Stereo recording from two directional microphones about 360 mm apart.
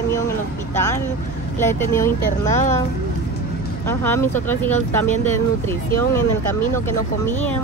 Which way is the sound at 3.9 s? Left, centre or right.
Centre.